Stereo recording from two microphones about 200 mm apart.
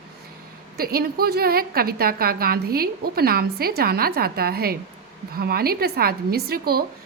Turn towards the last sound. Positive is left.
turn(degrees=-50)  # may be behind; listen again after turning